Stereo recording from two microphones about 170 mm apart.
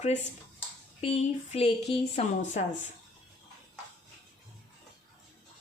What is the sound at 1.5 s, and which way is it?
Speech, 35° left (ahead or behind).